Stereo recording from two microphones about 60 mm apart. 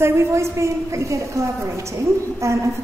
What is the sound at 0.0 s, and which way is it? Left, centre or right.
A woman's voice, right.